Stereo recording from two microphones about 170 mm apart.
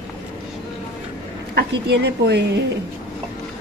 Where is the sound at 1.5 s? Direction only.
75° right (ahead or behind).